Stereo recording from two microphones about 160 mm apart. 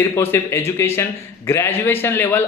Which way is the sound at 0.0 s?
15° left (ahead or behind).